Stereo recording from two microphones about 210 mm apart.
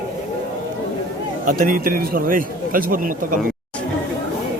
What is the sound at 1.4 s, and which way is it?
A man's voice, 40° right (ahead or behind).